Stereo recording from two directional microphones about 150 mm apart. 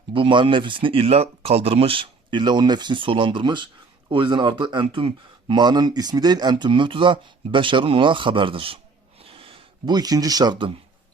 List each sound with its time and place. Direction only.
0.1 s speech: 35° right (ahead or behind)